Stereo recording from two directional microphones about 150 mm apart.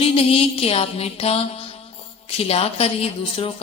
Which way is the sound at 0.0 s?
40° left (ahead or behind).